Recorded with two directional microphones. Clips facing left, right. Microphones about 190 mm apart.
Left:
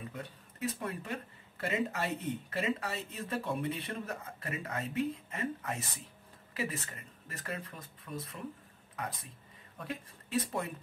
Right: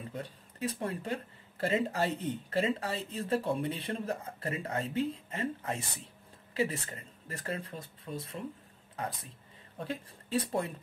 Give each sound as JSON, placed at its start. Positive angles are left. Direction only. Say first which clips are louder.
{"t": 0.1, "sound": "speech", "louder": "right 3 dB", "side_deg": -30}